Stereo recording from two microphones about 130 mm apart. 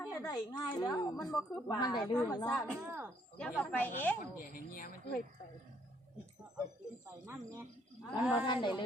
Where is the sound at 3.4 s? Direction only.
10° left (ahead or behind).